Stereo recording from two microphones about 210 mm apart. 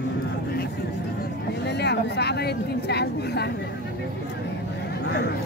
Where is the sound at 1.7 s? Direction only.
55° left (ahead or behind).